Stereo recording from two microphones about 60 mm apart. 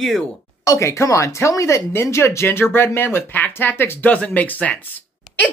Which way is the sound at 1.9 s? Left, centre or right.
Left.